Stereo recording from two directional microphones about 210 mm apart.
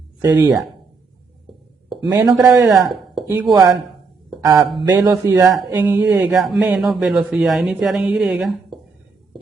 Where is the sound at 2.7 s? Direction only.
Centre (ahead or behind).